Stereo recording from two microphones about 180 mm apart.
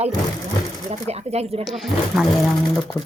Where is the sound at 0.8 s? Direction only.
35° right (ahead or behind).